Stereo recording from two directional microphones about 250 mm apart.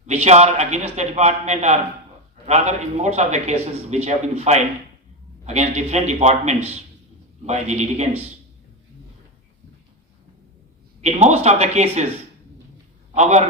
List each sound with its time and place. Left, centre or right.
0.0 s a man's voice: right
11.0 s a man's voice: right
13.1 s a man's voice: right